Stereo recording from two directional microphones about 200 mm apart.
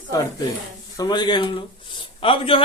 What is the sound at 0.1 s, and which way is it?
Speech, 15° left (ahead or behind).